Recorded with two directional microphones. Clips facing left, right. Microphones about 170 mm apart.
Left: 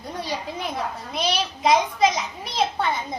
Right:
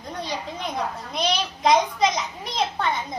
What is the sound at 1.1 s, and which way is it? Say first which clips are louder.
A child's voice: left 1 dB; 5° left (ahead or behind).